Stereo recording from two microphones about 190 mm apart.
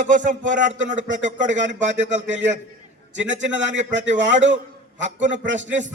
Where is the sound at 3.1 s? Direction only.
75° right (ahead or behind).